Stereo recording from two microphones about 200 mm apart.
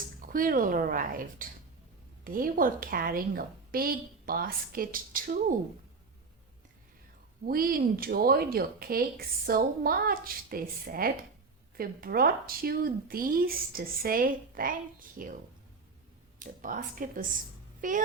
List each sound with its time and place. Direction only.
0.0 s speech: 45° right (ahead or behind)
7.4 s speech: 45° right (ahead or behind)
16.4 s speech: 40° right (ahead or behind)